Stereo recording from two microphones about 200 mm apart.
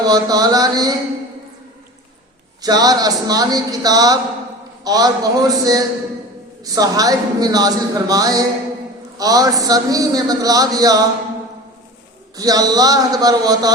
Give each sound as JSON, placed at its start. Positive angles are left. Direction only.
{"t": 0.0, "sound": "a woman's voice", "side_deg": -20}
{"t": 2.6, "sound": "a woman's voice", "side_deg": -20}
{"t": 12.4, "sound": "a woman's voice", "side_deg": -20}